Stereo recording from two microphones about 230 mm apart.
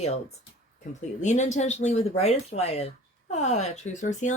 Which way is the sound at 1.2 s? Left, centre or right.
Left.